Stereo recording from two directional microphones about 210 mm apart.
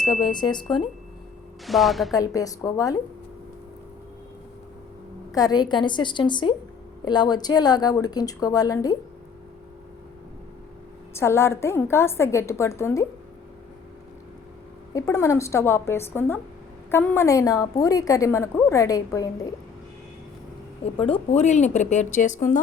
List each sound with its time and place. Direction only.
0.2 s a woman's voice: 20° left (ahead or behind)
1.6 s a woman's voice: centre (ahead or behind)
2.1 s a woman's voice: 15° left (ahead or behind)
5.3 s a woman's voice: 20° left (ahead or behind)
11.1 s a woman's voice: 10° left (ahead or behind)
14.9 s a woman's voice: 15° left (ahead or behind)
20.8 s speech: 25° left (ahead or behind)